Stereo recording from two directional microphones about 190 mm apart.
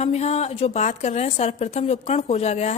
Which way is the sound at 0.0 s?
35° left (ahead or behind).